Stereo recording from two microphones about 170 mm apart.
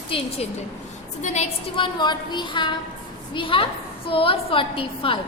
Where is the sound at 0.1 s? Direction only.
35° left (ahead or behind).